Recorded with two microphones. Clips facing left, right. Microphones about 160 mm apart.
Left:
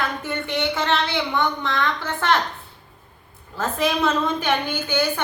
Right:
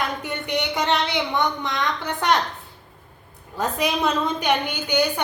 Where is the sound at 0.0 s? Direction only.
15° right (ahead or behind).